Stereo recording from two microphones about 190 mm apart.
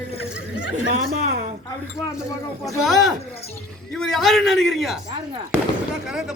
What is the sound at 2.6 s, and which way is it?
A man's voice, centre (ahead or behind).